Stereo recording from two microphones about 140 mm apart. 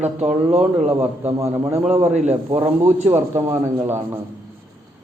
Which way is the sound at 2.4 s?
40° right (ahead or behind).